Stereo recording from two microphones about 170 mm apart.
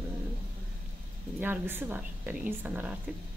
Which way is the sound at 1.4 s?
10° right (ahead or behind).